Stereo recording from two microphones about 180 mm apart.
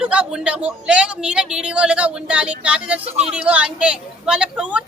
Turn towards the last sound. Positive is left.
turn(degrees=-5)  # may be behind; listen again after turning